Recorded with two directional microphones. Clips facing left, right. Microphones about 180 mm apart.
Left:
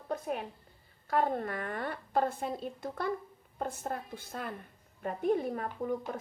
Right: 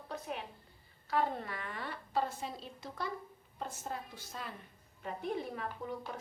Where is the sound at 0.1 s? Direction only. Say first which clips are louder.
Left 7 dB; 50° left (ahead or behind).